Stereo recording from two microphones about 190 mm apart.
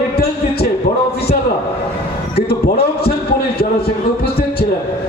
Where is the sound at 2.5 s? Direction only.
55° left (ahead or behind).